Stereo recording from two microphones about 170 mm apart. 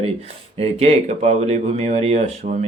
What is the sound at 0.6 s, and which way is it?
Speech, 35° right (ahead or behind).